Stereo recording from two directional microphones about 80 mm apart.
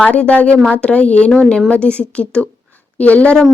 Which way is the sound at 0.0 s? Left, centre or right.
Centre.